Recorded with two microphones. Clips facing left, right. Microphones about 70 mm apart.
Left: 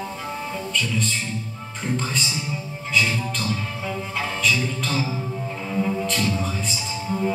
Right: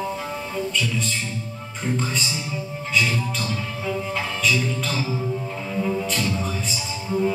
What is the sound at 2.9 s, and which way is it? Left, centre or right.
Speech, centre.